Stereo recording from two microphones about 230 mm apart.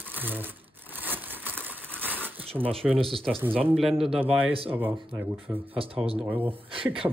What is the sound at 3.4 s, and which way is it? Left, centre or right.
Speech, centre.